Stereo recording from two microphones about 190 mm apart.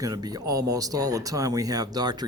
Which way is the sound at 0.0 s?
20° right (ahead or behind).